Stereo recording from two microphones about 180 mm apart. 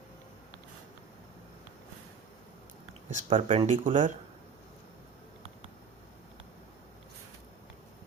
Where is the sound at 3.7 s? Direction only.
45° right (ahead or behind).